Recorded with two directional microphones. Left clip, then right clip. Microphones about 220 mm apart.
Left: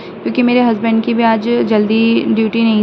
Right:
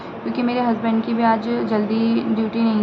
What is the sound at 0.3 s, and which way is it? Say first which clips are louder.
Speech: left 8 dB; 30° left (ahead or behind).